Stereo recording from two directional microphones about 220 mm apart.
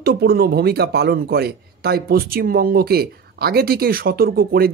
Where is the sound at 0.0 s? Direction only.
45° right (ahead or behind).